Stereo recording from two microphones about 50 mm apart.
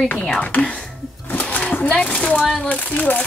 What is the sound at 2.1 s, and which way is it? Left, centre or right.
Speech, left.